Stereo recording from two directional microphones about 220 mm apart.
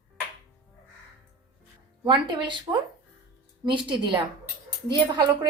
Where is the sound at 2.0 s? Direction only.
20° right (ahead or behind).